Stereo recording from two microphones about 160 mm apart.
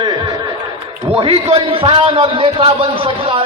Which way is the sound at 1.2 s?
35° right (ahead or behind).